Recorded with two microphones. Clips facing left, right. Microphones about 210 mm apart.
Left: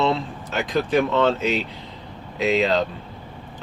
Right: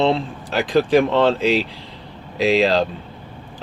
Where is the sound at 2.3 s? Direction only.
90° right.